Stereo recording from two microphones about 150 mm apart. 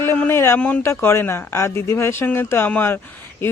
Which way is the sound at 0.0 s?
15° left (ahead or behind).